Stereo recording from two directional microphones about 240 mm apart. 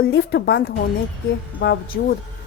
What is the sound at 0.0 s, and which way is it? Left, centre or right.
A woman's voice, left.